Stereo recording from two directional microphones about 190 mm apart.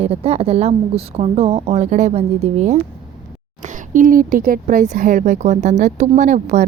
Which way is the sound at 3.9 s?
45° right (ahead or behind).